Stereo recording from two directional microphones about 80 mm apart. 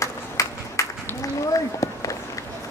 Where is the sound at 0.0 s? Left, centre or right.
Left.